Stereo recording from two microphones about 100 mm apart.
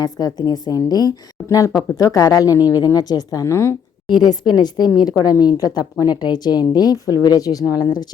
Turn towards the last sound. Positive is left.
turn(degrees=-15)  # may be behind; listen again after turning